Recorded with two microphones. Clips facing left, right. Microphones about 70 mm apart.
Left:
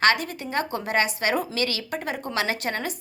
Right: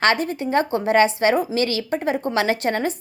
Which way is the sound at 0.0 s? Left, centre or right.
Right.